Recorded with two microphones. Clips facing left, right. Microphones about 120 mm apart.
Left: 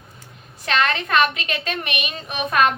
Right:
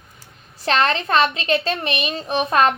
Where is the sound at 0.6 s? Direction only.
35° right (ahead or behind).